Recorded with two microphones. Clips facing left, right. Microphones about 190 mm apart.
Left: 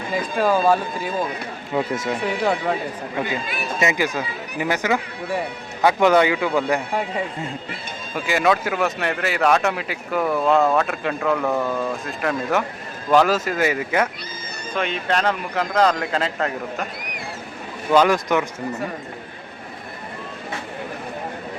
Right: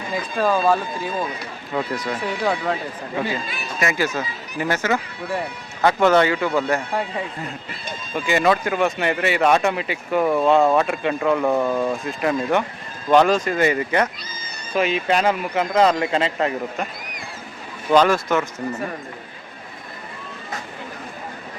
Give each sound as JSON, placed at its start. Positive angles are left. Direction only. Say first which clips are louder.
{"t": 0.3, "sound": "speech", "louder": "left 1 dB", "side_deg": 10}
{"t": 1.7, "sound": "speech", "louder": "left 2 dB", "side_deg": 20}
{"t": 3.8, "sound": "speech", "louder": "even", "side_deg": 20}
{"t": 8.1, "sound": "speech", "louder": "right 1 dB", "side_deg": 5}
{"t": 11.4, "sound": "speech", "louder": "right 3 dB", "side_deg": -15}
{"t": 12.0, "sound": "speech", "louder": "right 2 dB", "side_deg": 0}
{"t": 14.7, "sound": "speech", "louder": "right 3 dB", "side_deg": -5}
{"t": 17.9, "sound": "speech", "louder": "even", "side_deg": 15}